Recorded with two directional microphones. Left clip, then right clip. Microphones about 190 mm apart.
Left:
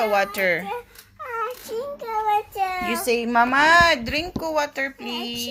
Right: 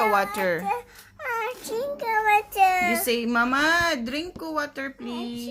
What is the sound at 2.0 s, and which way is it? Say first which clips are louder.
Child singing: right 2 dB; 25° right (ahead or behind).